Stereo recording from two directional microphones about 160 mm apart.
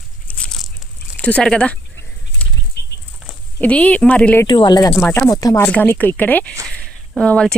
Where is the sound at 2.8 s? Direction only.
90° left.